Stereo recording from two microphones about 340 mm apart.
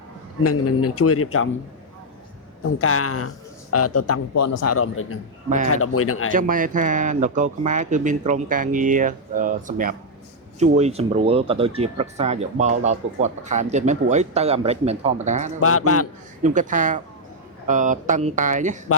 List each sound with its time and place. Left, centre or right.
0.4 s speech: left
2.6 s a man's voice: left
6.3 s speech: right
15.6 s speech: left
16.4 s speech: right